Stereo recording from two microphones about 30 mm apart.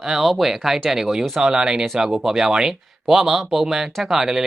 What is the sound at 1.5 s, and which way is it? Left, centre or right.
Speech, right.